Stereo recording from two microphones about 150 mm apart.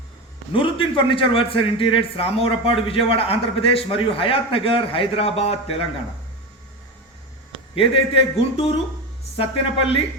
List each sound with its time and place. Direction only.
0.5 s a man's voice: 35° left (ahead or behind)
7.8 s a man's voice: 40° left (ahead or behind)